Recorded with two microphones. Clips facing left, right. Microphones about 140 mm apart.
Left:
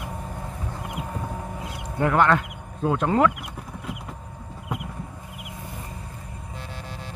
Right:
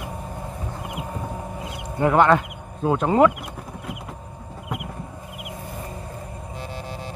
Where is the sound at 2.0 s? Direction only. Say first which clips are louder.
Right 3 dB; 10° right (ahead or behind).